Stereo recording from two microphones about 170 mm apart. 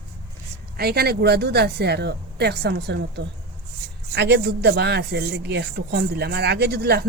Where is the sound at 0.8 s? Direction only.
65° right (ahead or behind).